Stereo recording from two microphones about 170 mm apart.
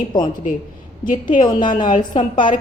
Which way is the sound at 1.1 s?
50° left (ahead or behind).